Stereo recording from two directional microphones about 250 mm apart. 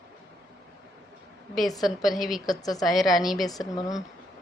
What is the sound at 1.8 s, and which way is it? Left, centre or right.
Speech, centre.